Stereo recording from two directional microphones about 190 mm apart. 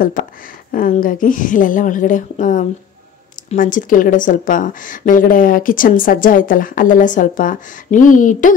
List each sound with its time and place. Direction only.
0.7 s a woman's voice: 45° left (ahead or behind)